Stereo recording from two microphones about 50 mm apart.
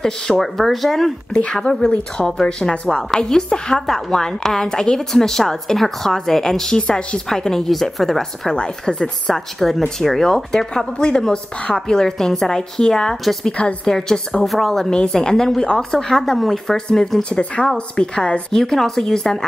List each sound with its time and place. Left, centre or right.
0.4 s speech: centre
1.3 s a woman's voice: left
8.5 s a woman's voice: centre
9.3 s a woman's voice: centre
13.2 s speech: centre
13.5 s a woman's voice: left
14.4 s a woman's voice: centre
18.5 s a woman's voice: centre